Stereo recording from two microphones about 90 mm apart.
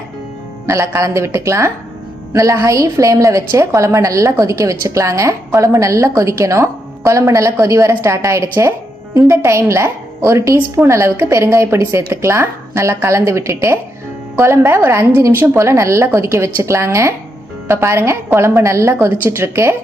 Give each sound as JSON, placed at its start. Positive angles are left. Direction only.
{"t": 0.7, "sound": "a woman's voice", "side_deg": -35}